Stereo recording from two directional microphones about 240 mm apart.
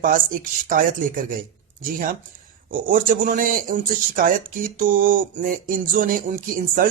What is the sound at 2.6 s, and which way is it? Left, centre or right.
Speech, right.